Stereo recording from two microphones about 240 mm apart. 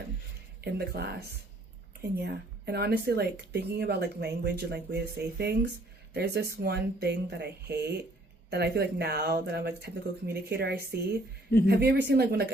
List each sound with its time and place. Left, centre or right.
0.6 s speech: right
2.1 s speech: right